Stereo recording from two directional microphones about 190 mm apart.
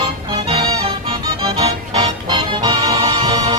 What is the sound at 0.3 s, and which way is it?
Music, 30° right (ahead or behind).